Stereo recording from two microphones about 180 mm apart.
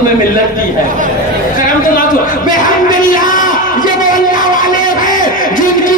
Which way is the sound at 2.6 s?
50° left (ahead or behind).